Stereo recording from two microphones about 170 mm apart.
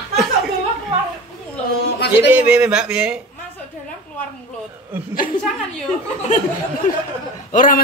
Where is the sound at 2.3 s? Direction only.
10° right (ahead or behind).